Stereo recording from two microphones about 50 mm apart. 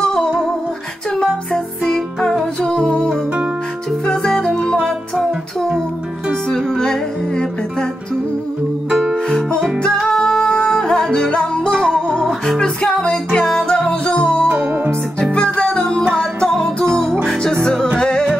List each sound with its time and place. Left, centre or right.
0.0 s music: centre
4.0 s music: centre
6.8 s music: centre
9.1 s music: centre
14.5 s music: right
15.3 s music: left